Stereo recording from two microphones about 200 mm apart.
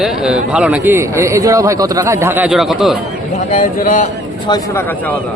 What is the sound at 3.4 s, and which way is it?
Speech, 40° left (ahead or behind).